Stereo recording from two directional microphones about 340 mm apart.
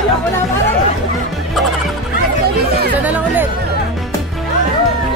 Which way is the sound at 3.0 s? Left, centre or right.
Centre.